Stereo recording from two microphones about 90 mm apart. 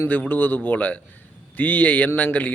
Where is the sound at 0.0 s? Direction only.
20° left (ahead or behind).